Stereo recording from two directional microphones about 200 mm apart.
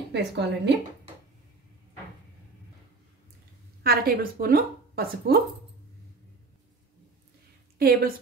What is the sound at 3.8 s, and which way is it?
Speech, 50° right (ahead or behind).